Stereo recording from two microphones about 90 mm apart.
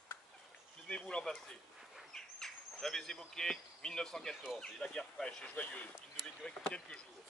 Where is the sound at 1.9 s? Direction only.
5° left (ahead or behind).